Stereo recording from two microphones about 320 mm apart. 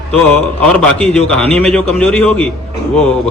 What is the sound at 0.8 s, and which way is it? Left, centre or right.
Speech, centre.